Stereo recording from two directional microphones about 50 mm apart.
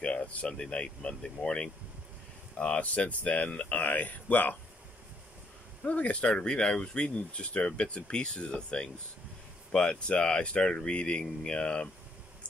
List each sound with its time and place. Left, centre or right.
0.0 s speech: left
2.5 s speech: left
5.9 s speech: left